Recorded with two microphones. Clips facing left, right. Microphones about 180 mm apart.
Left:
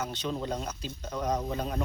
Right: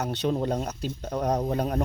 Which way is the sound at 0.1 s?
60° right (ahead or behind).